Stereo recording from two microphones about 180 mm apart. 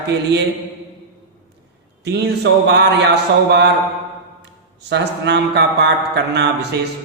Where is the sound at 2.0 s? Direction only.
70° right (ahead or behind).